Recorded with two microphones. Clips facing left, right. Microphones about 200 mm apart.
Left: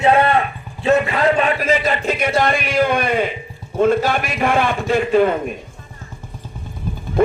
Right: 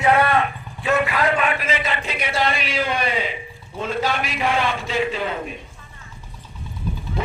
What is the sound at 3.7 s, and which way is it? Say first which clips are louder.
A man's voice: left 8 dB; 50° left (ahead or behind).